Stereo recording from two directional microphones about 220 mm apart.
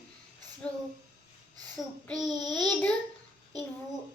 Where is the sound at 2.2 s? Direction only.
20° right (ahead or behind).